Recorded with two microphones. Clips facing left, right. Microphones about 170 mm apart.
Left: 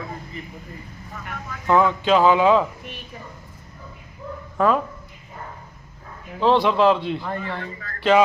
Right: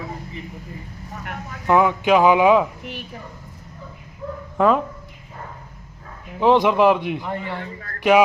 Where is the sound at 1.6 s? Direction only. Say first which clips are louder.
Right 1 dB; 15° right (ahead or behind).